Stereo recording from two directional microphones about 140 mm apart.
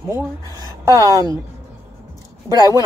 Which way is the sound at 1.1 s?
25° right (ahead or behind).